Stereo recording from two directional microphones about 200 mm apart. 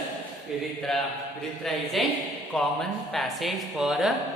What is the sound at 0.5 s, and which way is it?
A man's voice, 5° right (ahead or behind).